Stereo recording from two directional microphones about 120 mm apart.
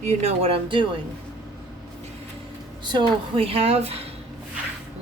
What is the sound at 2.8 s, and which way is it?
Speech, 45° right (ahead or behind).